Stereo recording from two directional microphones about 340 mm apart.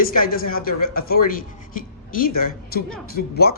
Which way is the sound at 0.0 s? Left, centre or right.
Left.